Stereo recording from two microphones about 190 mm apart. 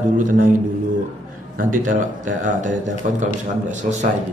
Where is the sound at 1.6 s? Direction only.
45° right (ahead or behind).